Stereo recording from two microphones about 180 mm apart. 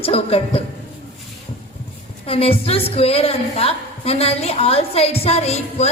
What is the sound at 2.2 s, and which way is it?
A woman's voice, 30° left (ahead or behind).